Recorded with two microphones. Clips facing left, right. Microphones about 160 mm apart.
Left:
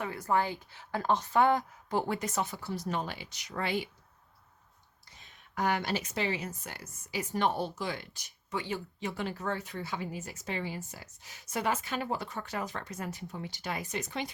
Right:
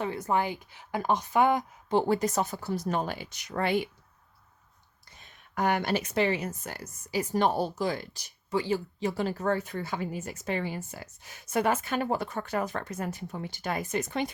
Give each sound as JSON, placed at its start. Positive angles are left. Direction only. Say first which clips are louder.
{"t": 0.0, "sound": "a woman's voice", "louder": "right 2 dB", "side_deg": -25}
{"t": 1.9, "sound": "speech", "louder": "right 7 dB", "side_deg": -30}
{"t": 5.1, "sound": "speech", "louder": "right 3 dB", "side_deg": -55}